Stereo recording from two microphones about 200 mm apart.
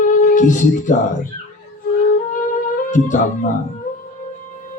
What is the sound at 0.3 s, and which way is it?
Speech, 40° left (ahead or behind).